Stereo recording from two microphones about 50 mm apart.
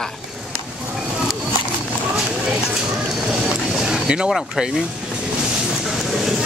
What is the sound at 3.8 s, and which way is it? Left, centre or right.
Vehicle, centre.